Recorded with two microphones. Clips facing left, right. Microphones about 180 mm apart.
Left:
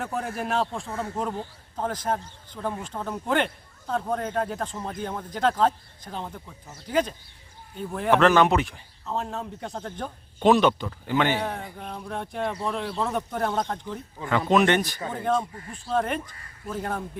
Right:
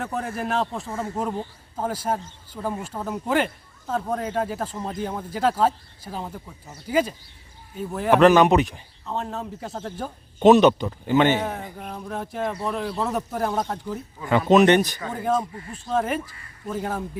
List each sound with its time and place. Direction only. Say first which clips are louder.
0.0 s speech: right 2 dB; centre (ahead or behind)
8.2 s speech: right 5 dB; 15° right (ahead or behind)
9.0 s speech: right 1 dB; centre (ahead or behind)
10.4 s a man's voice: right 5 dB; 20° right (ahead or behind)
11.3 s speech: right 2 dB; 5° right (ahead or behind)
14.3 s a man's voice: right 5 dB; 20° right (ahead or behind)
15.1 s speech: right 1 dB; 5° right (ahead or behind)